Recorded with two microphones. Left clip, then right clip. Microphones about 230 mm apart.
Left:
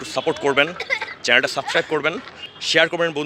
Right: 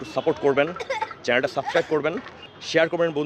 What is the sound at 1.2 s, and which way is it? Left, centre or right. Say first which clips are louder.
Speech: left 5 dB; centre.